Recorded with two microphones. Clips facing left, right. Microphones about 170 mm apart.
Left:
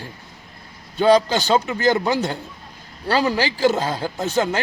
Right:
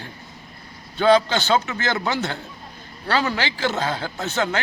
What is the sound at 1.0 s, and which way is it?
Speech, 40° left (ahead or behind).